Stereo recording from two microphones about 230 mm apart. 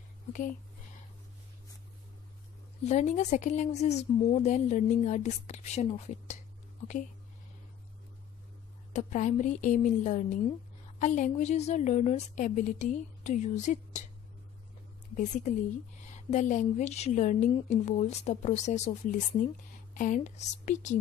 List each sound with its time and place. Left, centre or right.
2.8 s speech: left
8.9 s speech: left
15.1 s speech: left